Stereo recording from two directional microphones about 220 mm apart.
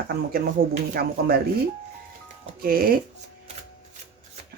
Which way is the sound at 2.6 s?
40° right (ahead or behind).